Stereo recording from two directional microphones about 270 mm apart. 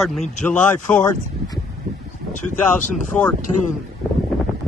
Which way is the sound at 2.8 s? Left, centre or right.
Left.